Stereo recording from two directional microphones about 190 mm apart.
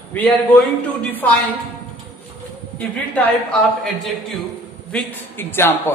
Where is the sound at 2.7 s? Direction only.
10° left (ahead or behind).